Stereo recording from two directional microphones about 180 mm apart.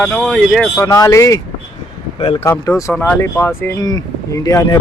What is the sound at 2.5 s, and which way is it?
Speech, 15° left (ahead or behind).